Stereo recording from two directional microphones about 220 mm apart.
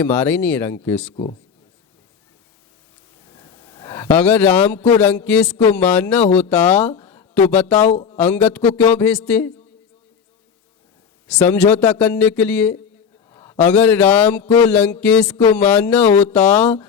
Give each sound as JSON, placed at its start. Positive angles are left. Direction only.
{"t": 0.0, "sound": "speech", "side_deg": 10}
{"t": 1.1, "sound": "speech", "side_deg": 25}
{"t": 3.2, "sound": "a sound", "side_deg": 15}
{"t": 4.9, "sound": "speech", "side_deg": 10}
{"t": 7.9, "sound": "speech", "side_deg": 30}
{"t": 8.1, "sound": "speech", "side_deg": 10}
{"t": 11.3, "sound": "a man's voice", "side_deg": 5}